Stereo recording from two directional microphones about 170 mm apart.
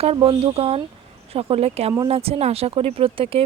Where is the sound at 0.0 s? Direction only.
35° right (ahead or behind).